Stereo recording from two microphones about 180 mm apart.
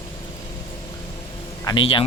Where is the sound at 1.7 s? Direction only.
25° left (ahead or behind).